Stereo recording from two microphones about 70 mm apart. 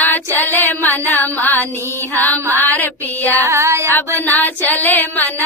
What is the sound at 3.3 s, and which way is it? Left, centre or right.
Music, right.